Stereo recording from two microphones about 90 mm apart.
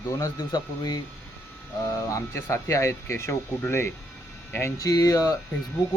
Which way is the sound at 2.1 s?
35° left (ahead or behind).